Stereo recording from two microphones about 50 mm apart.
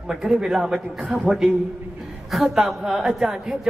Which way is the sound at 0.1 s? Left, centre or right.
Centre.